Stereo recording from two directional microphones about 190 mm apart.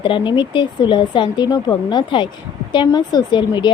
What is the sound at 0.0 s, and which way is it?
A woman's voice, 25° left (ahead or behind).